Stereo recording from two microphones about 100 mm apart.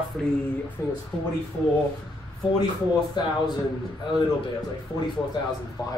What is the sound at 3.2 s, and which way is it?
Speech, 45° left (ahead or behind).